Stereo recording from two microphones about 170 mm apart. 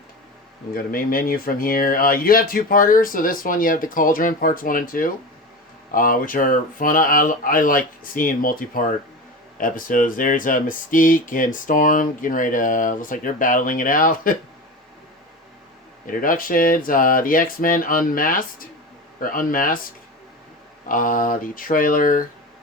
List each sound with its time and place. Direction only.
0.7 s speech: 55° left (ahead or behind)
16.0 s speech: 55° left (ahead or behind)
20.8 s speech: 50° left (ahead or behind)